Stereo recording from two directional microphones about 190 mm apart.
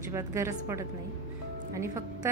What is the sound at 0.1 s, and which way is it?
A woman's voice, 15° right (ahead or behind).